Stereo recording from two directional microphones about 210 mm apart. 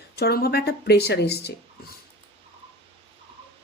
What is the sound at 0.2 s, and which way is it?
A woman's voice, 50° left (ahead or behind).